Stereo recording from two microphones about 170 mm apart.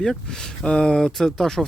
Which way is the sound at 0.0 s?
5° left (ahead or behind).